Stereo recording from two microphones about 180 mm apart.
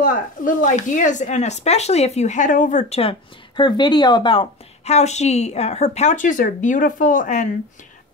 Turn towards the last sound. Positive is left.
turn(degrees=45)  # may be behind; listen again after turning